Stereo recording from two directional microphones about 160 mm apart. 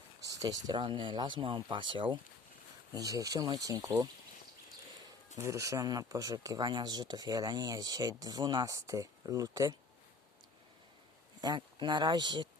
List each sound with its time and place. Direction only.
0.3 s speech: 25° right (ahead or behind)
5.4 s speech: 20° right (ahead or behind)
11.3 s speech: 30° right (ahead or behind)